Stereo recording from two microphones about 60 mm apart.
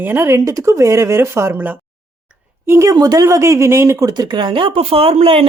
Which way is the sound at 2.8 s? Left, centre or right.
Right.